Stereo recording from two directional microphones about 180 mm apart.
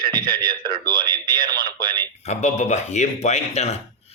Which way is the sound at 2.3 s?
40° left (ahead or behind).